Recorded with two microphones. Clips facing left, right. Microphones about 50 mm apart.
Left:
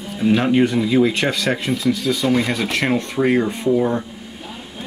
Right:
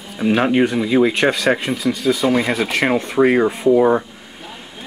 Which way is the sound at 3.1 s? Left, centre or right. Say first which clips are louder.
Right 5 dB; centre.